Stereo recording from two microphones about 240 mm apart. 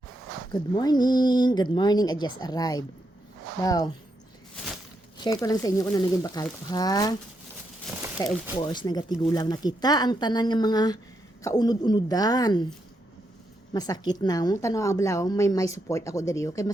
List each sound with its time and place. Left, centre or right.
0.5 s a woman's voice: centre
4.5 s a sound: centre
5.2 s a woman's voice: centre
8.2 s a woman's voice: centre
13.7 s a woman's voice: centre